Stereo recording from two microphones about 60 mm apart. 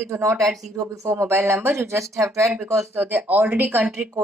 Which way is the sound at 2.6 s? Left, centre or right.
Right.